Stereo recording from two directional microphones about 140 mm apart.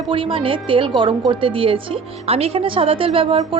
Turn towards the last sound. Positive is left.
turn(degrees=-40)  # may be behind; listen again after turning